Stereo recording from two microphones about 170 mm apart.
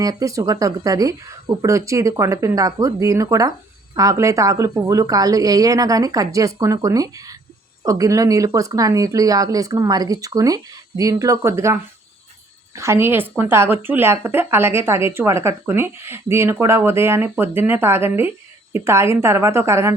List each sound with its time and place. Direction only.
0.0 s speech: 20° right (ahead or behind)